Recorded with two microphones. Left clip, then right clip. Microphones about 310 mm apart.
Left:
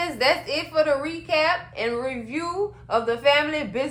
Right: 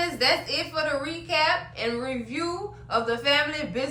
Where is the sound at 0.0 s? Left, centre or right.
Left.